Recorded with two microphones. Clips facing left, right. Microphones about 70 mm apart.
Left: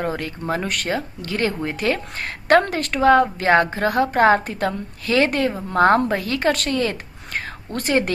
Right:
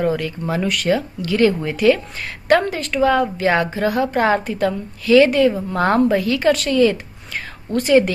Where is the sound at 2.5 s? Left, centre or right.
Left.